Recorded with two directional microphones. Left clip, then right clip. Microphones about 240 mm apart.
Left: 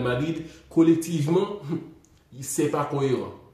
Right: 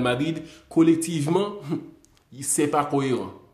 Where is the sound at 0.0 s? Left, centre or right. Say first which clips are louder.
Right 2 dB; right.